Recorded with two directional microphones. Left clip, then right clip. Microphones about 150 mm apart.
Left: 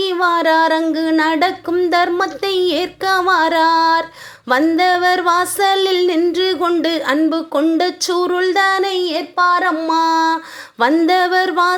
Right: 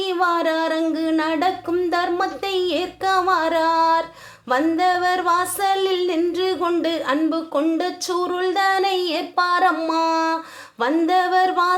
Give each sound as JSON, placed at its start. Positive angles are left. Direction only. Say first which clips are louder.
{"t": 0.0, "sound": "female singing", "louder": "left 5 dB", "side_deg": 25}
{"t": 0.9, "sound": "a sound", "louder": "left 6 dB", "side_deg": 30}
{"t": 4.4, "sound": "female singing", "louder": "left 5 dB", "side_deg": 35}
{"t": 10.0, "sound": "female singing", "louder": "left 5 dB", "side_deg": 30}